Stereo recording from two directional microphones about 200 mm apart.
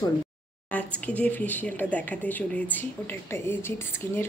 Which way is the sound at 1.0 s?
5° left (ahead or behind).